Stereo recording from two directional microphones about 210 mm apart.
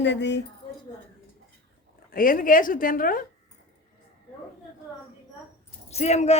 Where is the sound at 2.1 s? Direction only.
40° left (ahead or behind).